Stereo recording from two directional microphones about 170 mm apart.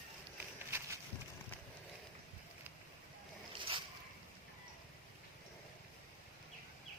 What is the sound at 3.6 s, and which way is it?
Boat, 30° right (ahead or behind).